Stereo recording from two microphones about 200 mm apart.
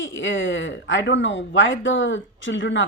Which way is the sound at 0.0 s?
70° left (ahead or behind).